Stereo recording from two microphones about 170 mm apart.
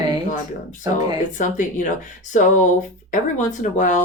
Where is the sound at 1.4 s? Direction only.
50° left (ahead or behind).